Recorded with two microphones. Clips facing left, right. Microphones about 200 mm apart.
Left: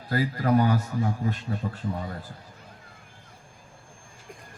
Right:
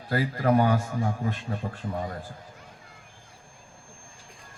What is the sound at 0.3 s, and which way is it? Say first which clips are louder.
Speech: right 1 dB; 45° right (ahead or behind).